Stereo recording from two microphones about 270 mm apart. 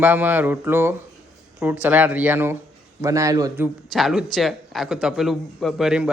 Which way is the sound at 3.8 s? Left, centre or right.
Centre.